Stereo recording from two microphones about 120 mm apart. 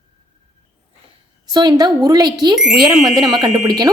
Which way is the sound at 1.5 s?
35° right (ahead or behind).